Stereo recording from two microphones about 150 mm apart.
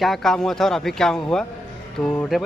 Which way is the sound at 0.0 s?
Centre (ahead or behind).